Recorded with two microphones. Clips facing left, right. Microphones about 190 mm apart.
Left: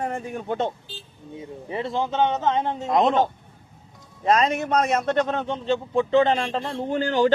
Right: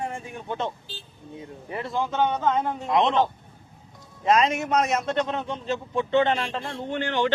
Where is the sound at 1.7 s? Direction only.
25° left (ahead or behind).